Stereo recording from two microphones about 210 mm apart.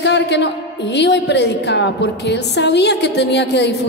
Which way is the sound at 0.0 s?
55° left (ahead or behind).